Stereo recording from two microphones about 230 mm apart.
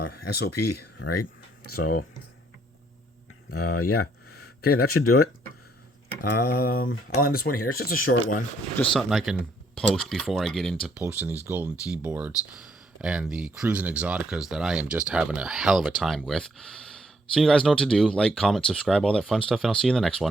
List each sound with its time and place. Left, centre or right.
0.1 s speech: left
0.5 s speech: left
3.5 s speech: left
6.5 s speech: left
8.8 s speech: centre